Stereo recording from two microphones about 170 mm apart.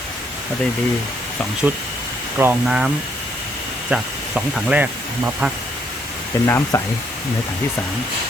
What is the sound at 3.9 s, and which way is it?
Speech, 5° right (ahead or behind).